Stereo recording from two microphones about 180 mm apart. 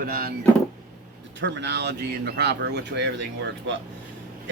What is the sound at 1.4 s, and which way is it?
Speech, 80° right.